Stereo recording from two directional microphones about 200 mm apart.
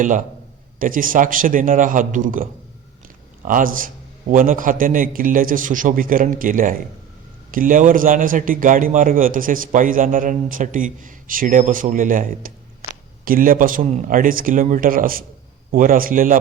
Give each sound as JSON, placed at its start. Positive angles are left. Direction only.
{"t": 0.8, "sound": "a man's voice", "side_deg": -45}